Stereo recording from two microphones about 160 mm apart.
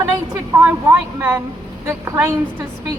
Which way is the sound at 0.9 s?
15° right (ahead or behind).